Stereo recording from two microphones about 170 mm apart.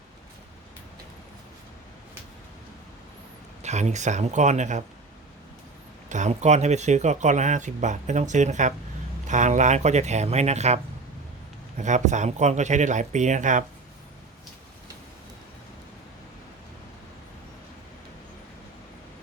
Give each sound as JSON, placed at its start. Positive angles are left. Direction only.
{"t": 3.6, "sound": "speech", "side_deg": -40}
{"t": 6.1, "sound": "speech", "side_deg": -45}
{"t": 11.8, "sound": "speech", "side_deg": -45}